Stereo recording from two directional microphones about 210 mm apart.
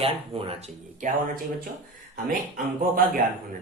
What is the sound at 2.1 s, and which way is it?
Speech, 40° right (ahead or behind).